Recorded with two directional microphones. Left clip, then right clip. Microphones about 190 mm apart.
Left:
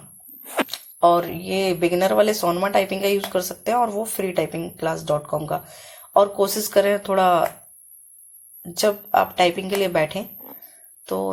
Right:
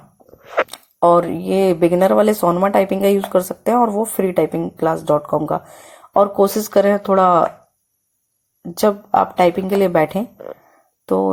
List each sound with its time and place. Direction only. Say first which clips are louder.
0.7 s speech: right 3 dB; 45° right (ahead or behind)
8.7 s speech: right 3 dB; 50° right (ahead or behind)